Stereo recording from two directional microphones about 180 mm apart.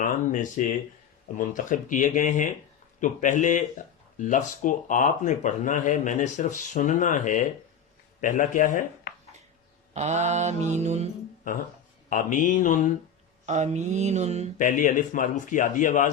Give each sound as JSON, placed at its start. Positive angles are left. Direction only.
{"t": 0.0, "sound": "speech", "side_deg": 45}
{"t": 9.9, "sound": "mantra", "side_deg": -40}
{"t": 12.1, "sound": "speech", "side_deg": 45}
{"t": 13.4, "sound": "mantra", "side_deg": -40}
{"t": 14.6, "sound": "speech", "side_deg": 45}